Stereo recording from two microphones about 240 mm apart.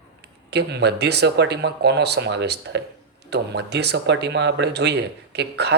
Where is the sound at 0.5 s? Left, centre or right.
Right.